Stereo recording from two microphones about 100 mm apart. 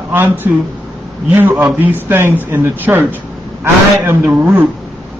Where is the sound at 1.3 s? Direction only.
20° right (ahead or behind).